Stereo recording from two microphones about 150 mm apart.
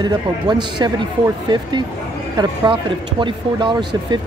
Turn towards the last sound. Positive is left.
turn(degrees=-30)  # may be behind; listen again after turning